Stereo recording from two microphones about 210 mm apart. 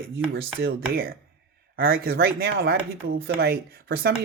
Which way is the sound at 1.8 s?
45° right (ahead or behind).